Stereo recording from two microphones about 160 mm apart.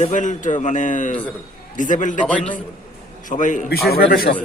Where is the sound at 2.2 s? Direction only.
5° left (ahead or behind).